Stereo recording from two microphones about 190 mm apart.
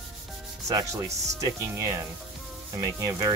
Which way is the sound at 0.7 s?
15° right (ahead or behind).